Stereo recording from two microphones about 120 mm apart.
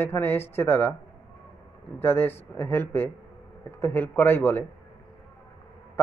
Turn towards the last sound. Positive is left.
turn(degrees=20)  # may be behind; listen again after turning